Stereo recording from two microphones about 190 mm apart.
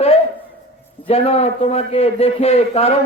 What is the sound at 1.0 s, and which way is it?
A man's voice, 35° left (ahead or behind).